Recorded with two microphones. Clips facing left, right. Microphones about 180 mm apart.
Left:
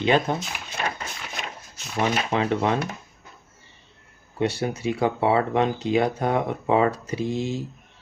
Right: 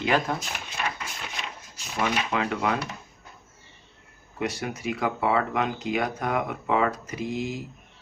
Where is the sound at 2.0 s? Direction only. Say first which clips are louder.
Left 3 dB; 30° left (ahead or behind).